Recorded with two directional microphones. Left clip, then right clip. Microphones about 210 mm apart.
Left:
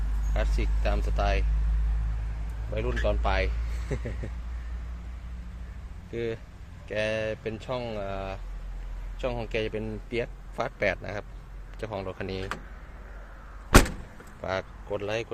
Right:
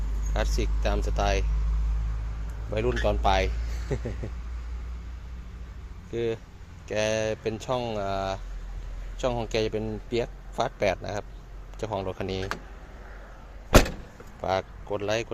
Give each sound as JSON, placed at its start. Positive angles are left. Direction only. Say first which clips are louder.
{"t": 0.3, "sound": "speech", "louder": "right 3 dB", "side_deg": -25}
{"t": 2.7, "sound": "speech", "louder": "right 3 dB", "side_deg": -30}
{"t": 6.1, "sound": "speech", "louder": "right 3 dB", "side_deg": -15}
{"t": 14.4, "sound": "speech", "louder": "right 4 dB", "side_deg": -15}